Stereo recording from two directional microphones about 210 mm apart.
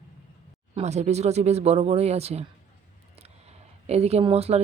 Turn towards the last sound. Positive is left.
turn(degrees=-30)  # may be behind; listen again after turning